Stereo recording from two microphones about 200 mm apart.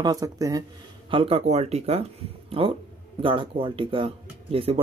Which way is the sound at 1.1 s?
25° right (ahead or behind).